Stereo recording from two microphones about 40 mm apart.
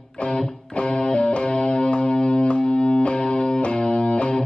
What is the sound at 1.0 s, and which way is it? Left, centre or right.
Music, left.